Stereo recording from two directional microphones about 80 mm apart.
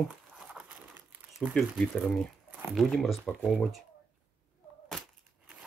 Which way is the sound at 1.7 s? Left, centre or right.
Centre.